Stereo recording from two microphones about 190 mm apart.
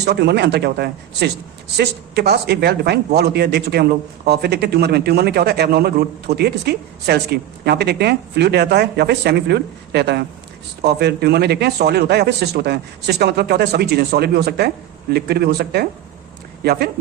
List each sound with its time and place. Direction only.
0.0 s speech: 60° right (ahead or behind)